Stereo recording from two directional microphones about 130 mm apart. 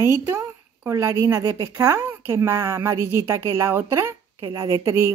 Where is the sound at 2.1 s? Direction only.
15° right (ahead or behind).